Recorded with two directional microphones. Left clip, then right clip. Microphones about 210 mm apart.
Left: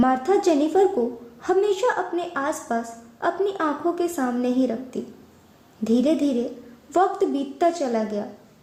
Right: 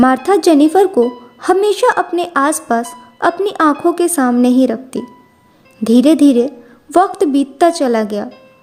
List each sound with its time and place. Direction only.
0.0 s speech: 40° right (ahead or behind)